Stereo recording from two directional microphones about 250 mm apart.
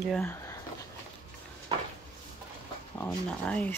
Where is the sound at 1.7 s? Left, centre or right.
Centre.